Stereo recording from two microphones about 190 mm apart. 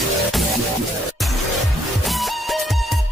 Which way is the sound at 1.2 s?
Centre (ahead or behind).